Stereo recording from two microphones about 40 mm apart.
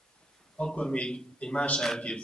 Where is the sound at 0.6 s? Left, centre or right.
Left.